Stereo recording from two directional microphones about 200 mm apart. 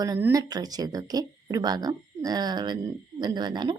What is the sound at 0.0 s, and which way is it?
A woman's voice, 15° right (ahead or behind).